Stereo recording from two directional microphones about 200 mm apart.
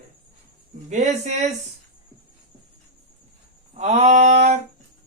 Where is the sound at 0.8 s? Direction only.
35° right (ahead or behind).